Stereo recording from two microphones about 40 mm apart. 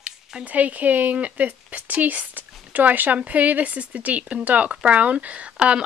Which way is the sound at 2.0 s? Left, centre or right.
Right.